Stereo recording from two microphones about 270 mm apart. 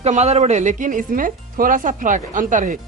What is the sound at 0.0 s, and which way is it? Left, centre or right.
Speech, right.